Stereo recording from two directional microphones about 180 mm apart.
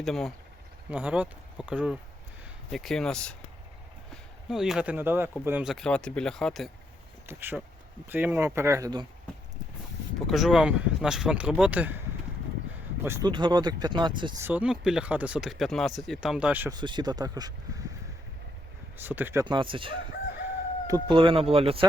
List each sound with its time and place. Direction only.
0.0 s speech: centre (ahead or behind)
4.4 s speech: centre (ahead or behind)
5.7 s speech: 5° left (ahead or behind)
7.3 s speech: 10° right (ahead or behind)
10.2 s speech: centre (ahead or behind)
13.1 s speech: 20° right (ahead or behind)
14.4 s speech: 5° right (ahead or behind)
16.7 s speech: 25° right (ahead or behind)
18.9 s speech: 10° right (ahead or behind)
19.5 s speech: 30° right (ahead or behind)